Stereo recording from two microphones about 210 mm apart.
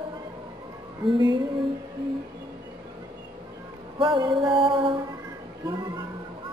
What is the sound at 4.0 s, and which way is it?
Music, 20° right (ahead or behind).